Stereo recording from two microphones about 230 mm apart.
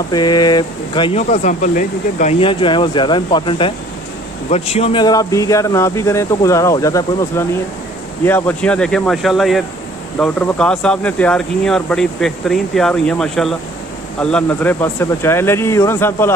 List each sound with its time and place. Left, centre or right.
0.1 s speech: centre; by 2.3 s left
2.4 s speech: left